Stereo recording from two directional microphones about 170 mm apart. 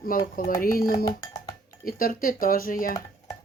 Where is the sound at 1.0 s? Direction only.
20° left (ahead or behind).